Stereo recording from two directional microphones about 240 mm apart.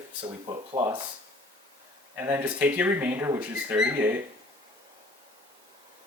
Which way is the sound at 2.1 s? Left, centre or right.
Centre.